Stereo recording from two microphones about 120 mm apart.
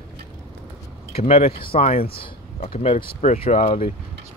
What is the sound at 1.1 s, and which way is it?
Speech, 55° left (ahead or behind).